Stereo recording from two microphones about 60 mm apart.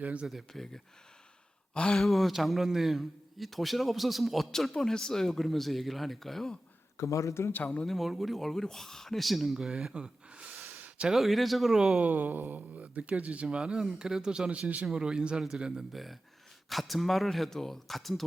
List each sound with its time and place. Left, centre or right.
0.0 s speech: right
0.3 s speech: centre
2.0 s speech: centre
6.9 s speech: left
7.5 s speech: left
7.9 s speech: centre
10.8 s a sound: right
11.1 s speech: centre
11.9 s speech: right
13.6 s speech: centre